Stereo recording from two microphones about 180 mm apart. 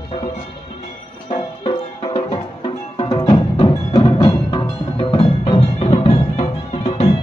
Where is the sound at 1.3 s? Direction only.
30° left (ahead or behind).